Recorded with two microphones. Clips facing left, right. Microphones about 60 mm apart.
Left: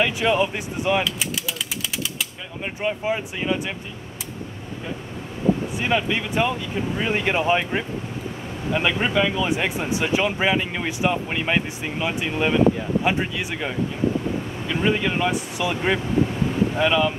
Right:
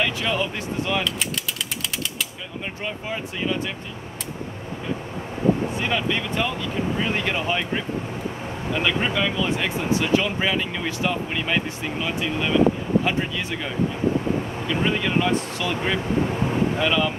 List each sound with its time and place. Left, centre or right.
0.0 s speech: centre
2.8 s speech: centre
5.8 s speech: centre